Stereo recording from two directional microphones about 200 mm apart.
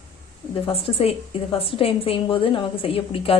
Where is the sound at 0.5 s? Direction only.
30° left (ahead or behind).